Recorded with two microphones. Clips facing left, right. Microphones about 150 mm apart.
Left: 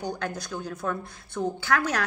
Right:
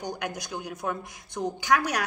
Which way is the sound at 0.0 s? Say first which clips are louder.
Left 2 dB; 15° right (ahead or behind).